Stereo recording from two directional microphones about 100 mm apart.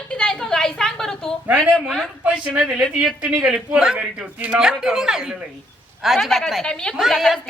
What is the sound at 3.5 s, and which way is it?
A man's voice, 5° right (ahead or behind).